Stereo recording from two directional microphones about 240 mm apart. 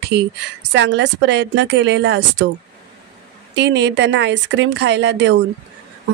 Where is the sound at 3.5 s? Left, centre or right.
Right.